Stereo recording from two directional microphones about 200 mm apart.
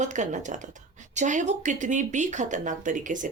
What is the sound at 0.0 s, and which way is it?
Speech, 35° right (ahead or behind).